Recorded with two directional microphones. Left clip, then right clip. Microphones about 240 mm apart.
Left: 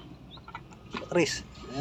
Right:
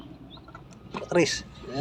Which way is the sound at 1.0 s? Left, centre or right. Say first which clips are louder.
Right 3 dB; centre.